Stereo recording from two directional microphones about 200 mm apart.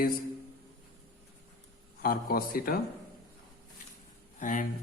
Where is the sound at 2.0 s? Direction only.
45° left (ahead or behind).